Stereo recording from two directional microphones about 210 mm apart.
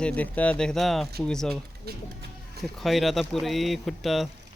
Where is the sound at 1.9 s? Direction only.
50° right (ahead or behind).